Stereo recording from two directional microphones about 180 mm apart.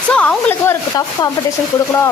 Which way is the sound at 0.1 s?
5° left (ahead or behind).